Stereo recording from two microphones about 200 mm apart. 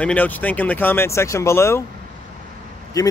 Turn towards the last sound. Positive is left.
turn(degrees=15)  # may be behind; listen again after turning